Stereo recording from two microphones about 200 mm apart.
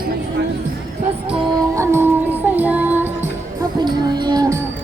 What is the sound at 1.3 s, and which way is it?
Music, 15° right (ahead or behind).